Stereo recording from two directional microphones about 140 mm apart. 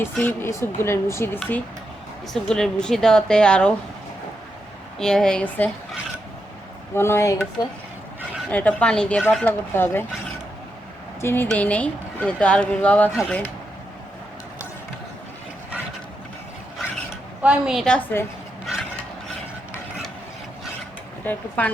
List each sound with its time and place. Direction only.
0.2 s a woman's voice: 15° left (ahead or behind)
4.9 s a woman's voice: 5° left (ahead or behind); by 7.7 s 25° left (ahead or behind)
8.4 s speech: 10° left (ahead or behind)
11.2 s speech: 15° left (ahead or behind)
17.4 s a woman's voice: 5° right (ahead or behind)
17.8 s speech: 15° left (ahead or behind)
18.6 s a sound: centre (ahead or behind)
21.2 s speech: 10° left (ahead or behind)